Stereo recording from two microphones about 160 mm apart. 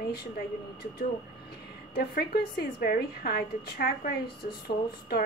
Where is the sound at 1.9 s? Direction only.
80° left.